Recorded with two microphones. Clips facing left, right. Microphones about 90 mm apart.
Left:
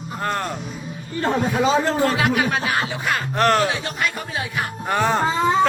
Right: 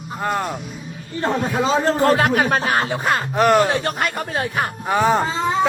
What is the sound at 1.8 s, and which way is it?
Speech, 45° right (ahead or behind).